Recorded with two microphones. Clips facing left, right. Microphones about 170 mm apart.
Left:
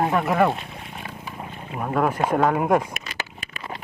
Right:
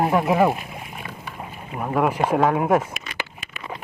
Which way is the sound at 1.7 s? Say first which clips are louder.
Right 1 dB; 5° right (ahead or behind).